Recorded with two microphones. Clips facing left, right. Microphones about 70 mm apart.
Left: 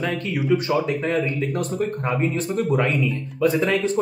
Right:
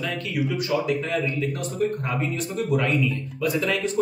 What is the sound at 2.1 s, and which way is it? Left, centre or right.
Speech, left.